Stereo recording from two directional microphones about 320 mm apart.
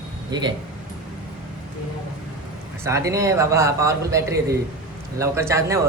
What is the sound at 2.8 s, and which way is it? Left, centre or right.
A man's voice, centre.